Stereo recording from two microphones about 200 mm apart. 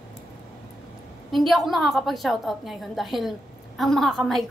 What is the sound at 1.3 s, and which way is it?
A woman's voice, centre (ahead or behind).